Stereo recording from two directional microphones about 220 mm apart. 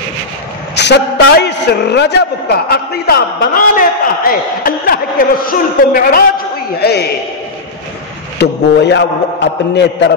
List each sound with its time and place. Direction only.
0.7 s a man's voice: 50° left (ahead or behind)
8.4 s a man's voice: 50° left (ahead or behind)